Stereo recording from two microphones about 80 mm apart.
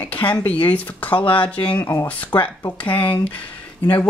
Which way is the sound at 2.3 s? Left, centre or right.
Left.